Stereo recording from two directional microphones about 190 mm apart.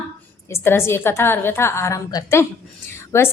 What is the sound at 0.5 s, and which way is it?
A woman's voice, 10° left (ahead or behind).